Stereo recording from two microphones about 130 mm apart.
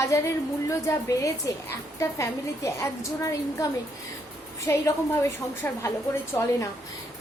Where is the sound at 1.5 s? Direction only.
25° left (ahead or behind).